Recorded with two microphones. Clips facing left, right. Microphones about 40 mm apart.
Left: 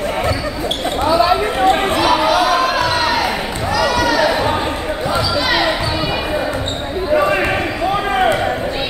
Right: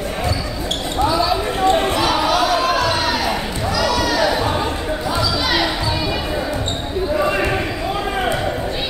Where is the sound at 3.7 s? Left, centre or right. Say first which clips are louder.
Left 4 dB; centre.